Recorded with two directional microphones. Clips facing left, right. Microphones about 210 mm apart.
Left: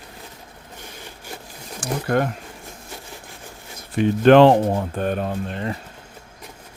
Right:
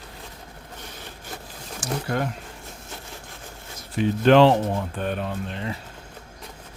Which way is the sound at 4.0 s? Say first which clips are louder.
Left 4 dB; 55° left (ahead or behind).